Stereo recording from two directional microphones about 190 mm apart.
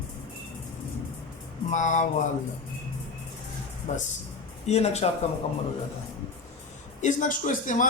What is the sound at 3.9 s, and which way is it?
Speech, 40° left (ahead or behind).